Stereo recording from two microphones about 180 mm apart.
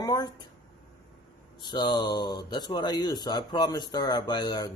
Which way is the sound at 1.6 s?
25° left (ahead or behind).